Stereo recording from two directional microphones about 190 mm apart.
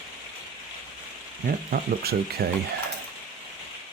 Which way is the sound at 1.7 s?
55° right (ahead or behind).